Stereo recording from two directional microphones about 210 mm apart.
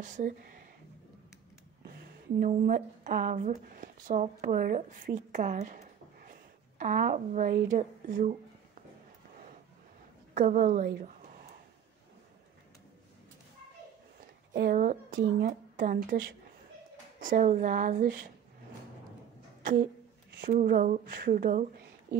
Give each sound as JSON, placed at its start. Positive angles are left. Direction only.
{"t": 0.0, "sound": "speech", "side_deg": -40}
{"t": 2.4, "sound": "speech", "side_deg": -40}
{"t": 6.8, "sound": "speech", "side_deg": -40}
{"t": 10.3, "sound": "a woman's voice", "side_deg": -35}
{"t": 14.5, "sound": "speech", "side_deg": -45}
{"t": 19.6, "sound": "a sound", "side_deg": -40}
{"t": 20.2, "sound": "speech", "side_deg": -45}